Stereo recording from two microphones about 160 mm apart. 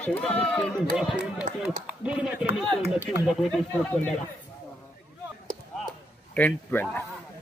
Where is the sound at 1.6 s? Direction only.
5° right (ahead or behind).